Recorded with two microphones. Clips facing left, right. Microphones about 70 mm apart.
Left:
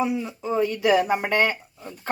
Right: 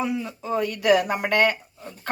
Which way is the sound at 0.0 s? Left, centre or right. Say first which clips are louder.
Left 2 dB; centre.